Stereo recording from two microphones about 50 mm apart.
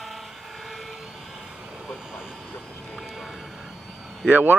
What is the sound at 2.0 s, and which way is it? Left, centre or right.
Vehicle, centre.